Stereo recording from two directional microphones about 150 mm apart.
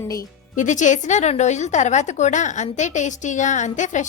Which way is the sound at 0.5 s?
55° left (ahead or behind).